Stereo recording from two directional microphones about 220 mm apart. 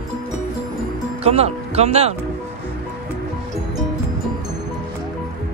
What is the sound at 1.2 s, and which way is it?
Speech, 30° right (ahead or behind).